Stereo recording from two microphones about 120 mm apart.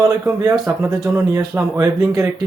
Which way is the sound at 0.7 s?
25° right (ahead or behind).